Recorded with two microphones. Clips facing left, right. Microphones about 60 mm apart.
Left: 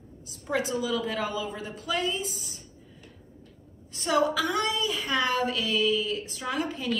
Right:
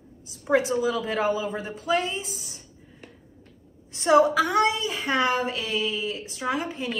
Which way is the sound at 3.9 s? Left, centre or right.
Right.